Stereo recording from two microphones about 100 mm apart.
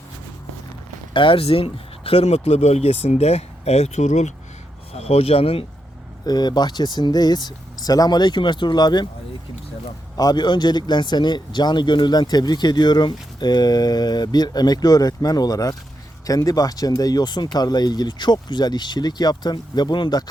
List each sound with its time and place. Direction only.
1.1 s speech: 60° left (ahead or behind); by 3.9 s 90° left
4.9 s speech: 90° left; by 5.6 s 70° left (ahead or behind)
6.2 s speech: 45° left (ahead or behind)
10.2 s speech: 45° left (ahead or behind)